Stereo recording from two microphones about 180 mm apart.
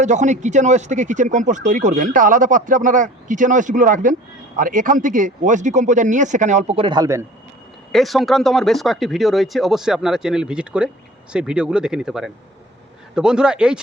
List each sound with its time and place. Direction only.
0.0 s speech: 40° right (ahead or behind); by 7.3 s 15° right (ahead or behind)
7.9 s speech: centre (ahead or behind)